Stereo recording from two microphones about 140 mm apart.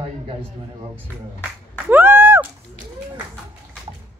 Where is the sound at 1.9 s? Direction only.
15° right (ahead or behind).